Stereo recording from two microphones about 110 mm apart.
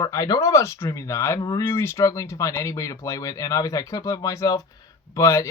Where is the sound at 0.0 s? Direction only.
30° left (ahead or behind).